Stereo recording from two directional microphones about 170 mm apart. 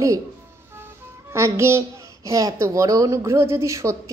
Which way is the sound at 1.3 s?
15° right (ahead or behind).